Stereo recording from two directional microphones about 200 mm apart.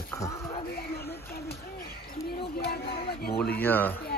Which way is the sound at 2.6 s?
50° left (ahead or behind).